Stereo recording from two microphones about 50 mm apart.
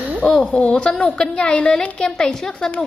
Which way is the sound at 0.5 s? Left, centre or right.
Centre.